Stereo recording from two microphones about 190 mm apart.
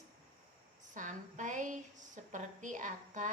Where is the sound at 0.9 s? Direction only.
40° right (ahead or behind).